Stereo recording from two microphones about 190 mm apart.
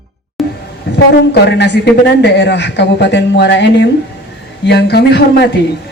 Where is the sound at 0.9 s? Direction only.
65° left (ahead or behind).